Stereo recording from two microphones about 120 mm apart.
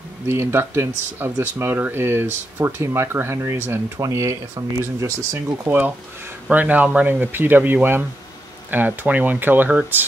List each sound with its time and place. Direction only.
0.3 s speech: 20° right (ahead or behind)